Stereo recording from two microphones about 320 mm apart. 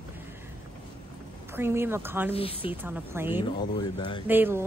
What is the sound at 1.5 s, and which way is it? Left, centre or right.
Speech, centre.